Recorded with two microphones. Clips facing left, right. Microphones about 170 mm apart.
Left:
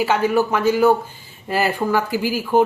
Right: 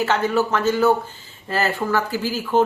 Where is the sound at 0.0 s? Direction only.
10° left (ahead or behind).